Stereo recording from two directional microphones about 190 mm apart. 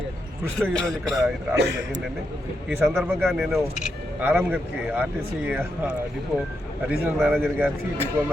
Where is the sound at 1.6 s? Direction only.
70° right (ahead or behind).